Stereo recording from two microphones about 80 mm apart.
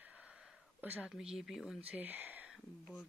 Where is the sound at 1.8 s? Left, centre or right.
Right.